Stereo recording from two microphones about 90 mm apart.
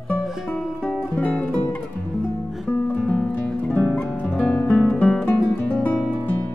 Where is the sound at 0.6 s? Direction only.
5° left (ahead or behind).